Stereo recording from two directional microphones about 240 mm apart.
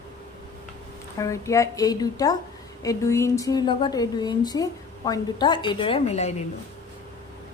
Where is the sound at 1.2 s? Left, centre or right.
Centre.